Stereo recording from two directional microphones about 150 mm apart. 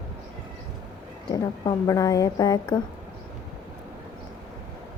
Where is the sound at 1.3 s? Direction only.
25° left (ahead or behind).